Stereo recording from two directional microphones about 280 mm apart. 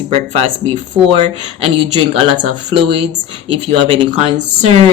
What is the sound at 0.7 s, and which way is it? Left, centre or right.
Speech, centre.